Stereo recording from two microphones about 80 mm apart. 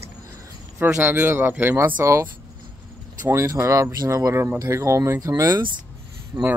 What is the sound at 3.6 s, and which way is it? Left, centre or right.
Speech, right.